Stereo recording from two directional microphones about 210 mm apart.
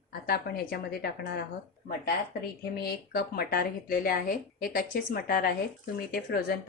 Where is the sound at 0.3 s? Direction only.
50° left (ahead or behind).